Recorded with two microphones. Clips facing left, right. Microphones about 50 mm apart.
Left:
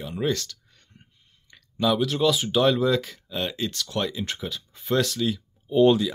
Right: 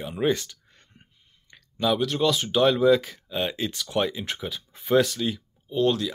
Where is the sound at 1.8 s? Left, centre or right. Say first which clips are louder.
Left 1 dB; centre.